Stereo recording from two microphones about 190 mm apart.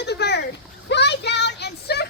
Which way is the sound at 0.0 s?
60° left (ahead or behind).